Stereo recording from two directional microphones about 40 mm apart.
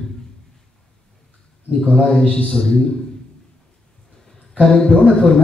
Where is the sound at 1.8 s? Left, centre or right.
Left.